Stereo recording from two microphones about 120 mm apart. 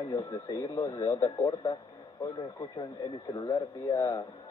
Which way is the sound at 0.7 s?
25° left (ahead or behind).